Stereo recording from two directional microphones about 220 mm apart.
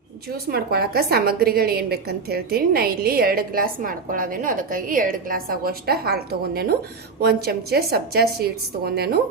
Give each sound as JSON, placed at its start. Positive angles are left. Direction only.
{"t": 0.4, "sound": "a woman's voice", "side_deg": -45}